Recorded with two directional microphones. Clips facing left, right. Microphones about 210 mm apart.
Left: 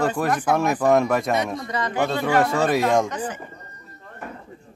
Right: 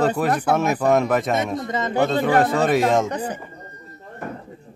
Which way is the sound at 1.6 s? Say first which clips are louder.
Right 2 dB; 25° right (ahead or behind).